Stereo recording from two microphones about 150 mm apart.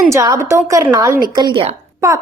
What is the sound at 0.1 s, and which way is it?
A woman's voice, 20° right (ahead or behind).